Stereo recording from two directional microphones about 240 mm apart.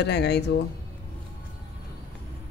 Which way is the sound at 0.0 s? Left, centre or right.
Left.